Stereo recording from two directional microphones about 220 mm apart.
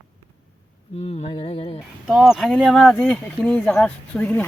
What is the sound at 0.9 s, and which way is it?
Music, 30° left (ahead or behind).